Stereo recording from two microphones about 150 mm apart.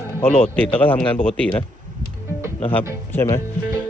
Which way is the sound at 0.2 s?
5° left (ahead or behind).